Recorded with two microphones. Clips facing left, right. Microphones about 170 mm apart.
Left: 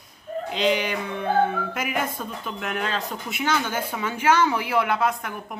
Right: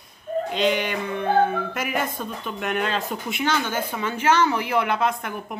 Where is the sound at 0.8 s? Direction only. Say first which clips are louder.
Right 2 dB; 5° left (ahead or behind).